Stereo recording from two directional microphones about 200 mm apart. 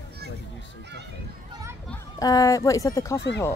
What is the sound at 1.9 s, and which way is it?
Speech, 15° left (ahead or behind).